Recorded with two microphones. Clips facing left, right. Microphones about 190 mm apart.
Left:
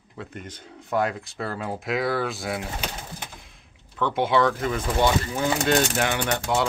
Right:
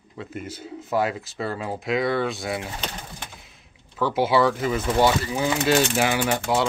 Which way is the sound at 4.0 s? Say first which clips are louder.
Right 2 dB; 5° right (ahead or behind).